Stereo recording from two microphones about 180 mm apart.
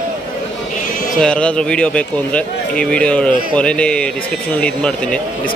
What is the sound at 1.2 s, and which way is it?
A man's voice, 5° left (ahead or behind).